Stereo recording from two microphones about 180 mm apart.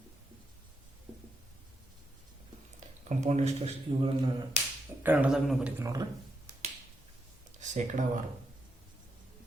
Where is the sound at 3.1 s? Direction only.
40° right (ahead or behind).